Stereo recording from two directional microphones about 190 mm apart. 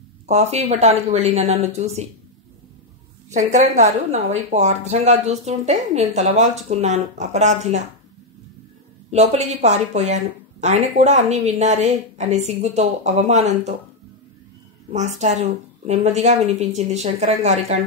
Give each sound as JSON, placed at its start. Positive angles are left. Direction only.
{"t": 0.3, "sound": "speech", "side_deg": -35}
{"t": 3.3, "sound": "speech", "side_deg": -40}
{"t": 9.1, "sound": "speech", "side_deg": -35}
{"t": 14.9, "sound": "speech", "side_deg": -35}